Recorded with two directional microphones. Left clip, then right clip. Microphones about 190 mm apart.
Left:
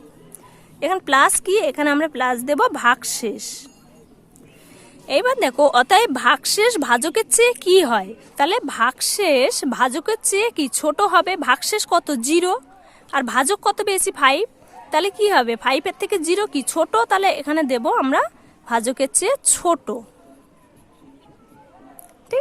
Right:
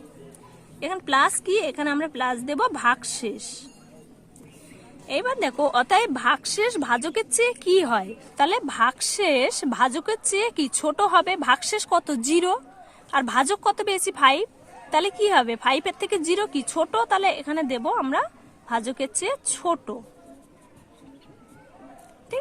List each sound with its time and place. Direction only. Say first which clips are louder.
0.8 s speech: left 5 dB; 30° left (ahead or behind)
5.0 s speech: left 7 dB; 25° left (ahead or behind)